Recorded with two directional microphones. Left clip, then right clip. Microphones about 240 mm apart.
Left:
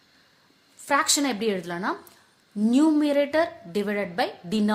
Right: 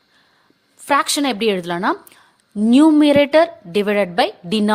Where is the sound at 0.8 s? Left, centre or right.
Right.